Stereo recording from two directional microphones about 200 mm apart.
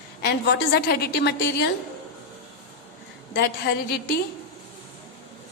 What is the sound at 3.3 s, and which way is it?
Speech, 55° left (ahead or behind).